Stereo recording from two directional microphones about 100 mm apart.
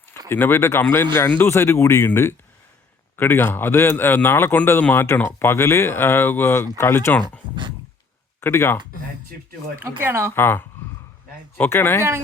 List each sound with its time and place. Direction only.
0.3 s speech: 20° left (ahead or behind)
8.4 s speech: 25° left (ahead or behind)
10.0 s speech: 25° right (ahead or behind)
10.3 s speech: 20° left (ahead or behind)